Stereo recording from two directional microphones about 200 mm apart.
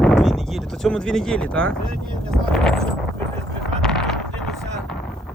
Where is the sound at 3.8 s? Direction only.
5° left (ahead or behind).